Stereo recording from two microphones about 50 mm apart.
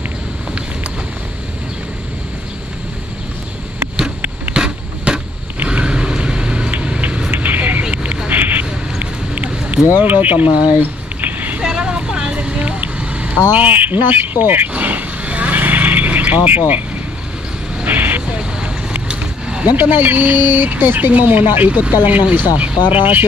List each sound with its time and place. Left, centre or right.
4.6 s a sound: centre
5.7 s vehicle: centre
7.2 s vehicle: right
8.3 s a sound: right
9.9 s speech: right
11.6 s vehicle: centre
13.5 s speech: right
14.7 s neigh: right
17.8 s vehicle: right
19.0 s speech: right